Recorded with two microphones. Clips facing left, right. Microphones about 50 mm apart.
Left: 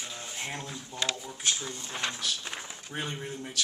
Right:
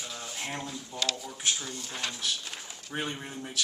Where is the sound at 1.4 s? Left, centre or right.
Centre.